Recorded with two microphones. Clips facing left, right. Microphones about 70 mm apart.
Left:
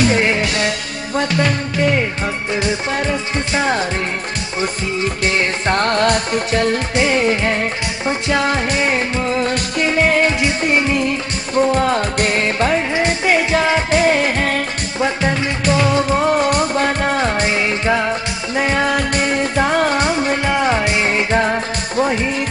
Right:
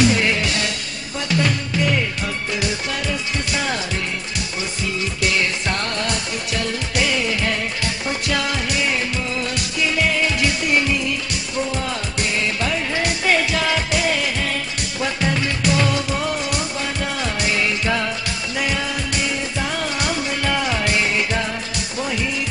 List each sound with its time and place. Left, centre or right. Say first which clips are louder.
0.1 s music: left 4 dB; left
2.5 s music: left 7 dB; left
7.0 s music: left 5 dB; left
11.0 s music: left 5 dB; left
12.9 s music: left 4 dB; left
15.0 s music: left 4 dB; left
18.9 s music: left 7 dB; left
20.1 s music: left 5 dB; left